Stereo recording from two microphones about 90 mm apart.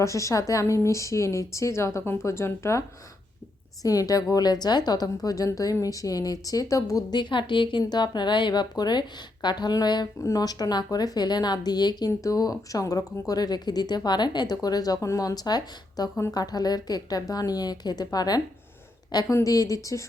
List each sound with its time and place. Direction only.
0.0 s a woman's voice: 35° left (ahead or behind)
3.8 s a woman's voice: 40° left (ahead or behind)
7.2 s a woman's voice: 65° left (ahead or behind)
10.2 s a woman's voice: 35° left (ahead or behind)
10.4 s speech: 45° left (ahead or behind)
19.3 s a woman's voice: 35° left (ahead or behind)